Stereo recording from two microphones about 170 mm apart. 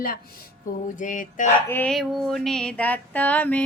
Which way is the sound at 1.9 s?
Centre (ahead or behind).